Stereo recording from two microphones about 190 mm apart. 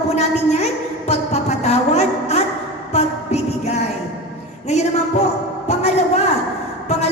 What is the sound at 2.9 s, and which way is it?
Music, 35° left (ahead or behind).